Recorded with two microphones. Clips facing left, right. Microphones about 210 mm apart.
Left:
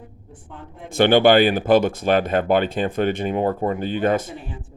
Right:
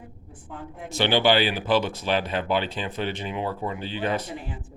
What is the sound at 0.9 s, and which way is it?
Speech, 55° left (ahead or behind).